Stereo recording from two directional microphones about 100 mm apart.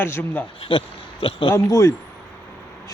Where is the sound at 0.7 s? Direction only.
60° left (ahead or behind).